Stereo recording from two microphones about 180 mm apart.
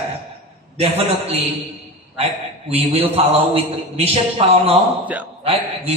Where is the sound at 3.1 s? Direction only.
35° right (ahead or behind).